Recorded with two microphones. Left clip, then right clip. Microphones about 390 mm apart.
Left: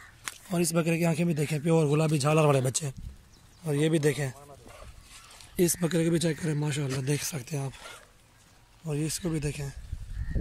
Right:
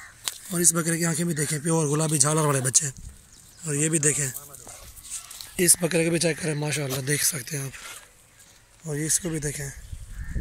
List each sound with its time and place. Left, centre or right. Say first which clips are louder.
0.2 s speech: right 4 dB; centre
5.6 s speech: right 4 dB; centre
8.8 s speech: right 4 dB; centre